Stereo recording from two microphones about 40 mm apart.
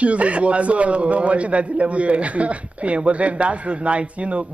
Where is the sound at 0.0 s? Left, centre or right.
Right.